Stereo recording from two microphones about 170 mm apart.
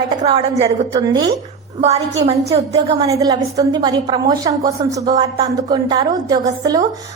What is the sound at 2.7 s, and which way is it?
A woman's voice, 20° right (ahead or behind).